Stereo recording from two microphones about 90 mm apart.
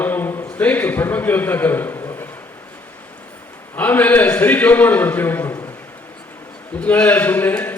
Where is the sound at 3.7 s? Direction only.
20° left (ahead or behind).